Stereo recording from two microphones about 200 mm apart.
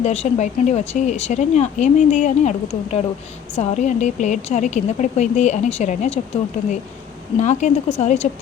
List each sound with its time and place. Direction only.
0.0 s a woman's voice: 35° left (ahead or behind)